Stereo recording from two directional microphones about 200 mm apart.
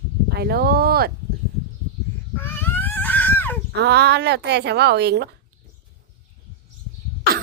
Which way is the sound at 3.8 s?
55° right (ahead or behind).